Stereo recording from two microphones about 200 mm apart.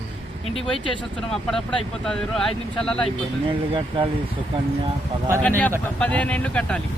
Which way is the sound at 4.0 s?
25° right (ahead or behind).